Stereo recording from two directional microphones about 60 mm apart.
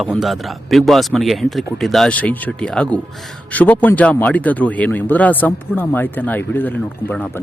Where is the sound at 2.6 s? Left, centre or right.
Centre.